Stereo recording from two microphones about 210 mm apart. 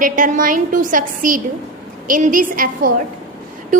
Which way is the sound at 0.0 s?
40° right (ahead or behind).